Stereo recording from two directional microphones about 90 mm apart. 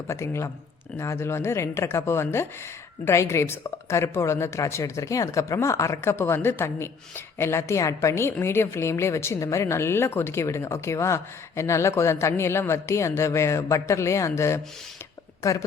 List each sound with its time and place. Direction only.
0.1 s a woman's voice: 30° left (ahead or behind)